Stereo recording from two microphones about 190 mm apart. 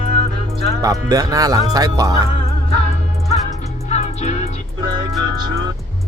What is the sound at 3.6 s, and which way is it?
Music, 35° left (ahead or behind).